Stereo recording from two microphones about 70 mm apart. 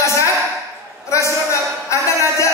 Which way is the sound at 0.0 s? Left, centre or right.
Left.